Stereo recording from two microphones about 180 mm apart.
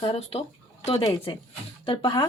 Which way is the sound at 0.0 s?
30° left (ahead or behind).